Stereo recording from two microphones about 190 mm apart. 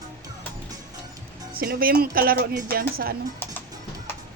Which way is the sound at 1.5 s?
50° right (ahead or behind).